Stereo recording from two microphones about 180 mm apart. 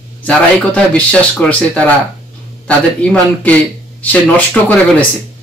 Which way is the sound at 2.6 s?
5° left (ahead or behind).